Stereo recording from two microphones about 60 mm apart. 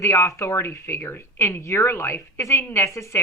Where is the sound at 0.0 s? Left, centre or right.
Left.